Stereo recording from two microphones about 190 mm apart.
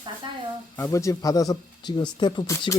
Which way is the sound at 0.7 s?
15° left (ahead or behind).